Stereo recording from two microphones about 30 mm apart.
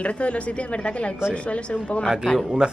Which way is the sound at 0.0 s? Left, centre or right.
Left.